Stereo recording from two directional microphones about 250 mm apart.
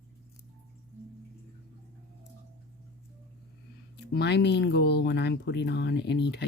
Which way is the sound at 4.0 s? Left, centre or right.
Left.